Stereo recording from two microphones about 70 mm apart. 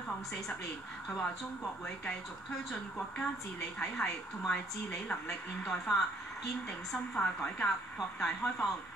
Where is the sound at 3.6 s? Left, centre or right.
Centre.